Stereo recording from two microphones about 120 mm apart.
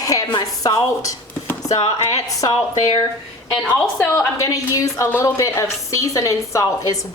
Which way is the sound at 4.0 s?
25° left (ahead or behind).